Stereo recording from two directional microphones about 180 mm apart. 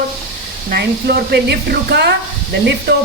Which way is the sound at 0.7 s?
65° right (ahead or behind).